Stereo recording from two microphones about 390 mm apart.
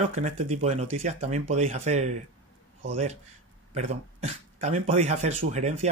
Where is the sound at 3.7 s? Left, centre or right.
Centre.